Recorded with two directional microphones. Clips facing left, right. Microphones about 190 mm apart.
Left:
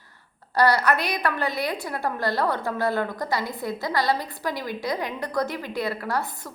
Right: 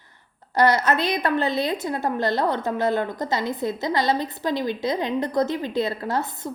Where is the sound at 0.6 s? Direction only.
20° right (ahead or behind).